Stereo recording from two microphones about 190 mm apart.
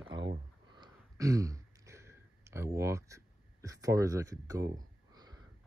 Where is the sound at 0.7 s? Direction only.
20° right (ahead or behind).